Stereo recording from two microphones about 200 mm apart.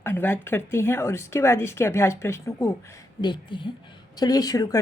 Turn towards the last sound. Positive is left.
turn(degrees=20)  # may be behind; listen again after turning